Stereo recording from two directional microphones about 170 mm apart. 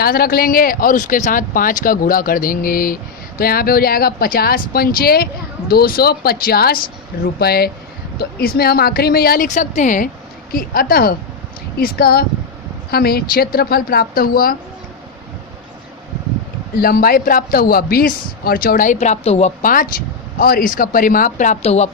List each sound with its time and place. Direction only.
0.0 s speech: 60° left (ahead or behind)
16.7 s speech: 60° left (ahead or behind); by 19.5 s 40° left (ahead or behind)
19.6 s speech: 55° left (ahead or behind); by 21.8 s 40° left (ahead or behind)